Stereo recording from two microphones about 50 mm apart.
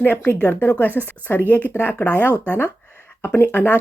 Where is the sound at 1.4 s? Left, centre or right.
Left.